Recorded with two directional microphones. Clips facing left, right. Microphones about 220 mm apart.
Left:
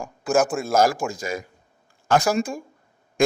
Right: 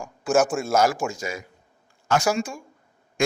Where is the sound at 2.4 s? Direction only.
35° left (ahead or behind).